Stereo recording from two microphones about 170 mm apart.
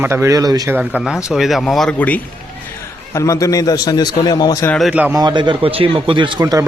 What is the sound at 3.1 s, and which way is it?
A man's voice, 20° left (ahead or behind).